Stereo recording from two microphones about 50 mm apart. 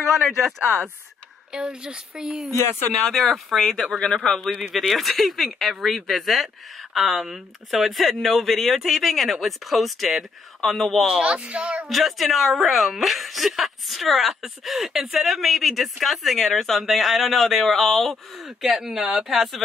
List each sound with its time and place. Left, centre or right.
1.5 s a woman's voice: centre
3.1 s speech: centre
4.5 s a woman's voice: centre
4.7 s speech: centre
11.1 s speech: centre
11.9 s speech: centre
18.8 s a woman's voice: centre